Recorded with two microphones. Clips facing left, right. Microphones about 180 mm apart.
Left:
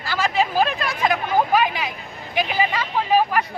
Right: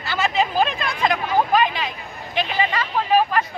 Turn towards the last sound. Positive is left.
turn(degrees=10)  # may be behind; listen again after turning